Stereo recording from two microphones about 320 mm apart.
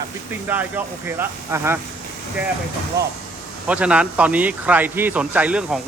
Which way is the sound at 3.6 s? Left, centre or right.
Centre.